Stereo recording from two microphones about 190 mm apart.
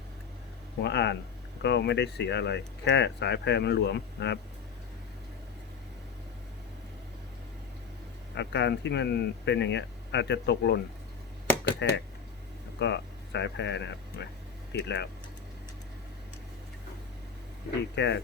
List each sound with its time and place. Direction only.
0.8 s speech: 60° left (ahead or behind)
8.4 s speech: 65° left (ahead or behind)
11.8 s speech: 65° left (ahead or behind)
17.9 s speech: 65° left (ahead or behind)